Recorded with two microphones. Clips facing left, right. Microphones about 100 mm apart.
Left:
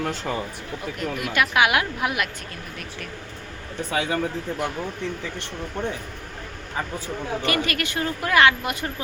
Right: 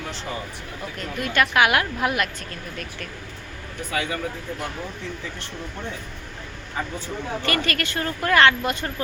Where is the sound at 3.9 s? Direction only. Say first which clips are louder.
Left 2 dB; 30° left (ahead or behind).